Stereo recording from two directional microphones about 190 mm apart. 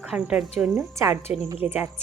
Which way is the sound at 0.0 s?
5° right (ahead or behind).